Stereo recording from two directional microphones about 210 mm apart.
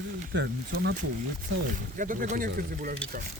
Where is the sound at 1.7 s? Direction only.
40° right (ahead or behind).